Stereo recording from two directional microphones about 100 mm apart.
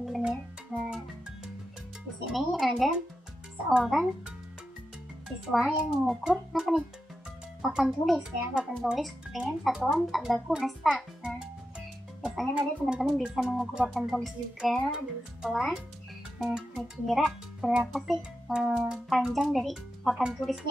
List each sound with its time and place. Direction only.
0.0 s music: centre (ahead or behind)
2.2 s speech: 5° right (ahead or behind)
5.5 s speech: 5° right (ahead or behind)
16.3 s music: centre (ahead or behind)
16.8 s speech: 5° right (ahead or behind)